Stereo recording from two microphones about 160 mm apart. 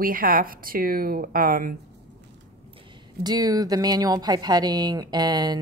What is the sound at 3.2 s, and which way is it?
Speech, 25° right (ahead or behind).